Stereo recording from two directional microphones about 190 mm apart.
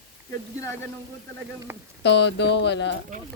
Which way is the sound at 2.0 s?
65° left (ahead or behind).